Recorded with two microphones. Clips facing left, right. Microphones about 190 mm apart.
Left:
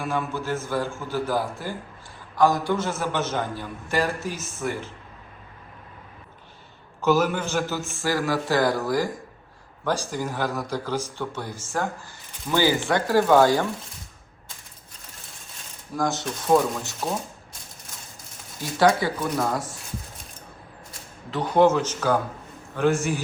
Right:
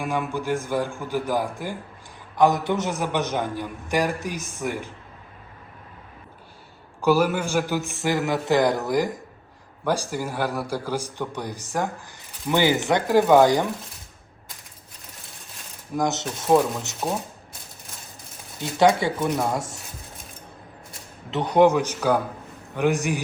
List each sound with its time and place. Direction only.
0.0 s a man's voice: 15° right (ahead or behind)
7.0 s a man's voice: 10° right (ahead or behind)
16.0 s a man's voice: 20° right (ahead or behind)
18.6 s a man's voice: 20° right (ahead or behind)
21.2 s a man's voice: 20° right (ahead or behind)